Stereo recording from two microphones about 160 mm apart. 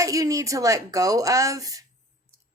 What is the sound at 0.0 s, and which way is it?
A woman's voice, 20° right (ahead or behind).